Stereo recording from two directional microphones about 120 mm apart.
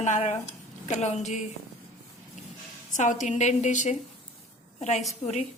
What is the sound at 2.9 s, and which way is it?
A woman's voice, 90° left.